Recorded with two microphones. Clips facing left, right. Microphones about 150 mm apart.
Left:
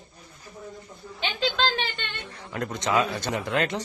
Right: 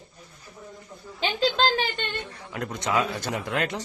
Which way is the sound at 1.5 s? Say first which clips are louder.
Right 3 dB; 40° right (ahead or behind).